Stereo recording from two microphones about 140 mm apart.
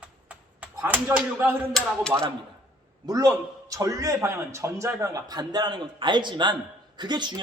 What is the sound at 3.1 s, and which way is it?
A man's voice, 25° right (ahead or behind).